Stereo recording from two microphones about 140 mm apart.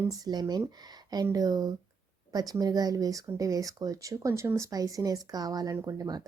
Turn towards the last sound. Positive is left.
turn(degrees=-25)  # may be behind; listen again after turning